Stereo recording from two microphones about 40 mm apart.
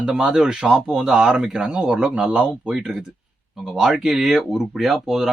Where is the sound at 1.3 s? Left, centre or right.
Right.